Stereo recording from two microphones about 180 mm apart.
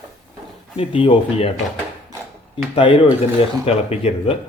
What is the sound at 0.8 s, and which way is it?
Speech, 30° left (ahead or behind).